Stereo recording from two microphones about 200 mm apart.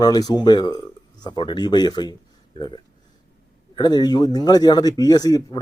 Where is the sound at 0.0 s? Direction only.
20° left (ahead or behind).